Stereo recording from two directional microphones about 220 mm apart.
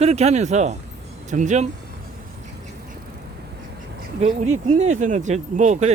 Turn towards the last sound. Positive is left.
turn(degrees=-35)  # may be behind; listen again after turning